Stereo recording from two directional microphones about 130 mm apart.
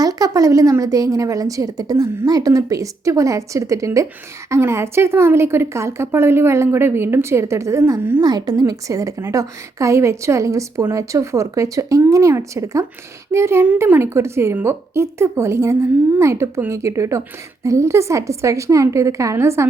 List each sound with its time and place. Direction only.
0.0 s a woman's voice: 30° right (ahead or behind)
8.2 s a woman's voice: 30° right (ahead or behind)